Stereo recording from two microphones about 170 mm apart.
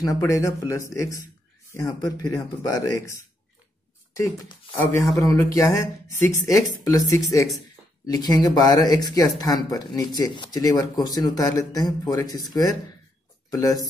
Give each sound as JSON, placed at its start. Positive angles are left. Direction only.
{"t": 0.0, "sound": "speech", "side_deg": 20}